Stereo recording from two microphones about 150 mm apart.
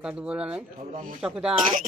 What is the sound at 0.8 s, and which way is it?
Speech, 60° right (ahead or behind).